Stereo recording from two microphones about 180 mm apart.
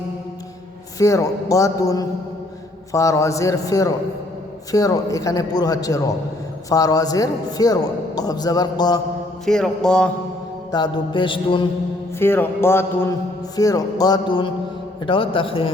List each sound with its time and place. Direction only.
0.9 s a man's voice: 20° left (ahead or behind)
9.5 s speech: 5° left (ahead or behind)
10.7 s a man's voice: 25° left (ahead or behind)
12.2 s a man's voice: 10° left (ahead or behind); by 15.7 s 30° left (ahead or behind)